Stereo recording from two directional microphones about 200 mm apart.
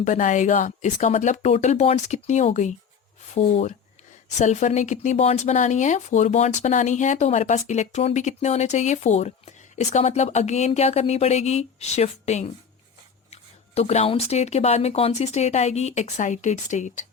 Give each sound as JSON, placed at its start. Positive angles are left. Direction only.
{"t": 0.0, "sound": "speech", "side_deg": 35}